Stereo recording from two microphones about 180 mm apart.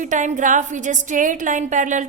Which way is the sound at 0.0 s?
45° right (ahead or behind).